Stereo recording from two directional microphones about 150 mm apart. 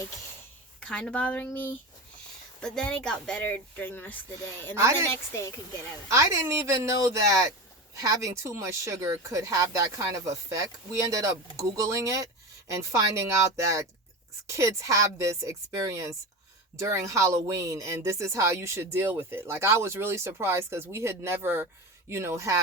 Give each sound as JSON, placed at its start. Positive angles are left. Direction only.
{"t": 0.8, "sound": "a woman's voice", "side_deg": 5}
{"t": 6.1, "sound": "speech", "side_deg": -20}
{"t": 14.5, "sound": "speech", "side_deg": -20}